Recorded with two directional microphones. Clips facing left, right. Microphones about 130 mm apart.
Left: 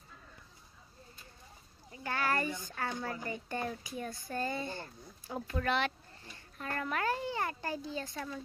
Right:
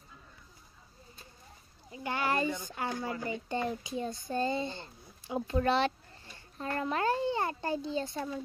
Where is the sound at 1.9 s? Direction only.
20° right (ahead or behind).